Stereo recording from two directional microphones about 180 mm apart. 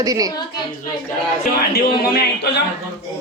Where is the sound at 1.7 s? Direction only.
65° left (ahead or behind).